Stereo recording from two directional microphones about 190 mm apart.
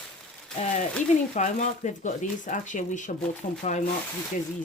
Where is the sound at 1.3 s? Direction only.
40° left (ahead or behind).